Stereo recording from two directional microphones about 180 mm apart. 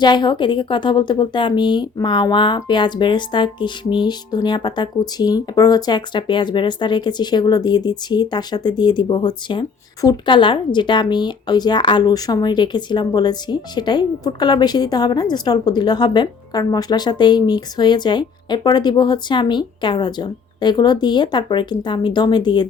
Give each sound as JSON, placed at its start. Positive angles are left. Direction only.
{"t": 0.0, "sound": "a woman's voice", "side_deg": 25}